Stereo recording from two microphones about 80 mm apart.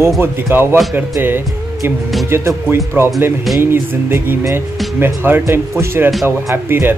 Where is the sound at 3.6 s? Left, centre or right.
Right.